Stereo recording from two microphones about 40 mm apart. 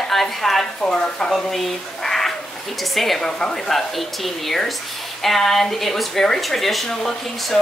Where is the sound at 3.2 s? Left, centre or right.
Centre.